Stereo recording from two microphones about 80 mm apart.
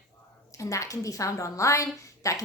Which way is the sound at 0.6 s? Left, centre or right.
Left.